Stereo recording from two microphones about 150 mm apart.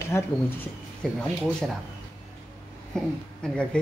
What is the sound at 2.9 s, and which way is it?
Speech, 5° left (ahead or behind).